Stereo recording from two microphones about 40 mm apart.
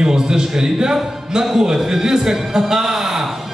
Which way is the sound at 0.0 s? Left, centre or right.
Centre.